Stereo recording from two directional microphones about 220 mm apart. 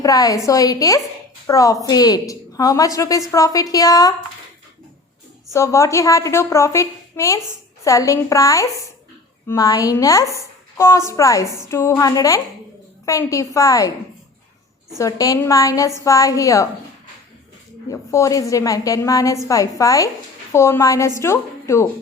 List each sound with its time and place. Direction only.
0.0 s a woman's voice: 15° left (ahead or behind)
5.5 s a woman's voice: 15° left (ahead or behind)
14.9 s a woman's voice: 15° left (ahead or behind)
17.8 s a woman's voice: 15° left (ahead or behind)